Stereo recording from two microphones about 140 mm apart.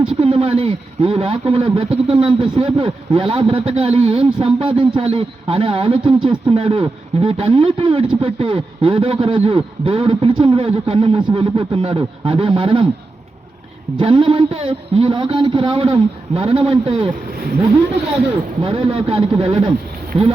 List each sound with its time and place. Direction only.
0.2 s speech: 45° right (ahead or behind)
14.0 s speech: 40° right (ahead or behind)
18.6 s speech: 40° right (ahead or behind)